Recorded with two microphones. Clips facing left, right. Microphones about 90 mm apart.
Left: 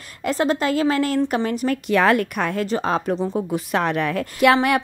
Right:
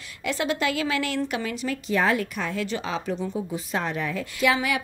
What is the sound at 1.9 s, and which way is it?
Speech, 65° left (ahead or behind).